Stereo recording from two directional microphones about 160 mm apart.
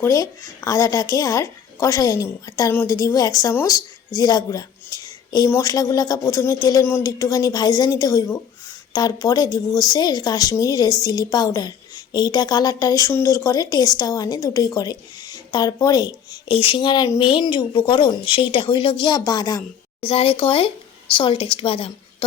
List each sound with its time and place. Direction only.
0.0 s a woman's voice: 20° left (ahead or behind)
20.1 s a woman's voice: 35° left (ahead or behind)